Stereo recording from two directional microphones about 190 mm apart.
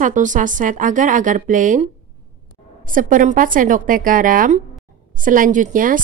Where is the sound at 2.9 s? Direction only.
45° right (ahead or behind).